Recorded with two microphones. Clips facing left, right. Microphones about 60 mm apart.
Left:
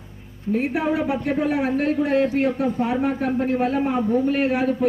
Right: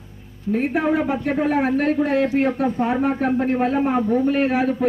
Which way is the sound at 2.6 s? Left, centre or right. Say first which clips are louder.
Right 2 dB; right.